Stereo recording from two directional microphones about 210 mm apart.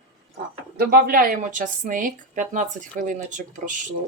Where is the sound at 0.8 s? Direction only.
45° right (ahead or behind).